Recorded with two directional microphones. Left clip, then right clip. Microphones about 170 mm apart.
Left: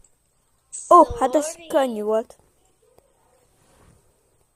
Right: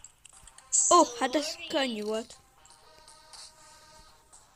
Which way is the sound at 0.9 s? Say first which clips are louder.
Left 9 dB; 25° left (ahead or behind).